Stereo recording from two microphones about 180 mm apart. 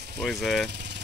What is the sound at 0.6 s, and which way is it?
Jackhammer, 70° right (ahead or behind).